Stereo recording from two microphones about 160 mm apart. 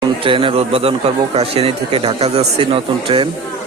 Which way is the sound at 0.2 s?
35° right (ahead or behind).